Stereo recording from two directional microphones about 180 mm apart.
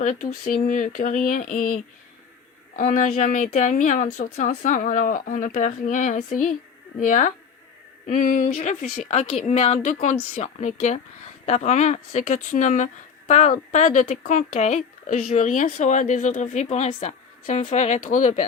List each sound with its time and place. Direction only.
0.0 s speech: 45° left (ahead or behind)